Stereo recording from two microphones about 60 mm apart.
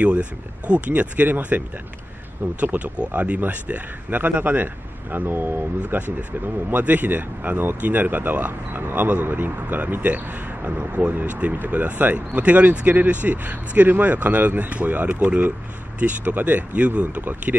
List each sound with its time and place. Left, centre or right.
0.0 s speech: right
2.6 s speech: right